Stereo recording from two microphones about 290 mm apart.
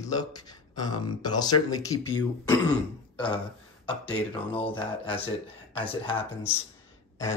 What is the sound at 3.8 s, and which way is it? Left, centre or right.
Speech, centre.